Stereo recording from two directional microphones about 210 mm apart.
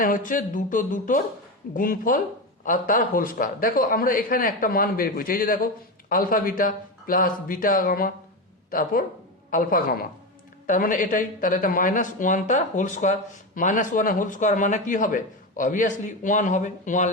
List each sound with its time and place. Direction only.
0.0 s a man's voice: 40° left (ahead or behind)